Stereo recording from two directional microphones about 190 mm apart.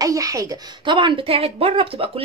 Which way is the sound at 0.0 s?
15° right (ahead or behind).